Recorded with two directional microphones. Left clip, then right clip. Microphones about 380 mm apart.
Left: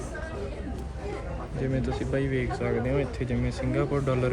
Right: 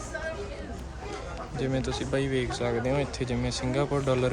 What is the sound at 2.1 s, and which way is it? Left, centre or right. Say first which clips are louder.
Speech: right 1 dB; centre.